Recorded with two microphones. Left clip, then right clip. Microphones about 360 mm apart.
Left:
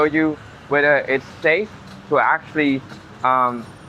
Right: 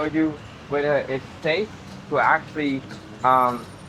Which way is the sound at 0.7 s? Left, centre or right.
Left.